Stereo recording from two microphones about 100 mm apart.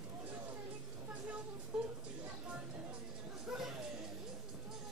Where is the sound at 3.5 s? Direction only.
5° right (ahead or behind).